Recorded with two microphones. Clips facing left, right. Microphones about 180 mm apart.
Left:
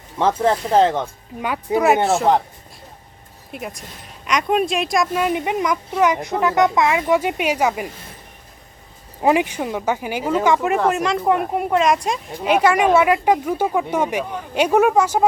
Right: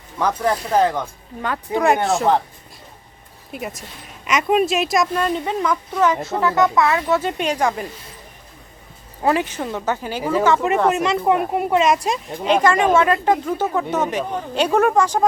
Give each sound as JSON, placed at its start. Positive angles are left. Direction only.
{"t": 0.2, "sound": "speech", "side_deg": 25}
{"t": 1.4, "sound": "speech", "side_deg": 10}
{"t": 3.5, "sound": "speech", "side_deg": 0}
{"t": 5.1, "sound": "speech", "side_deg": 10}
{"t": 9.2, "sound": "speech", "side_deg": 15}
{"t": 10.7, "sound": "speech", "side_deg": 0}
{"t": 12.5, "sound": "speech", "side_deg": 10}